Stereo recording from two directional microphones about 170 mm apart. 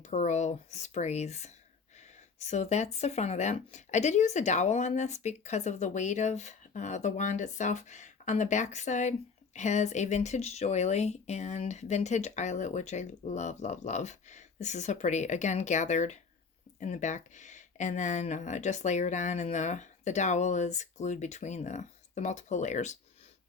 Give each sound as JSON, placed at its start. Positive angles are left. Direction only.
{"t": 0.0, "sound": "speech", "side_deg": 45}